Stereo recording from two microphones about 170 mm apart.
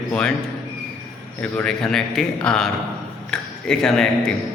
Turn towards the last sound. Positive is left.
turn(degrees=5)  # may be behind; listen again after turning